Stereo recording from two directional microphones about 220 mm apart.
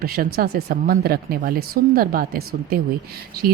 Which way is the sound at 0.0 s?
45° right (ahead or behind).